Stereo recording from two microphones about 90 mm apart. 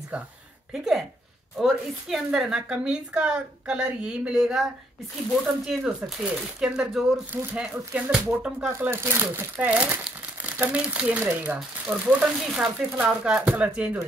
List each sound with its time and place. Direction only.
0.7 s speech: 5° right (ahead or behind)
8.6 s speech: 25° right (ahead or behind)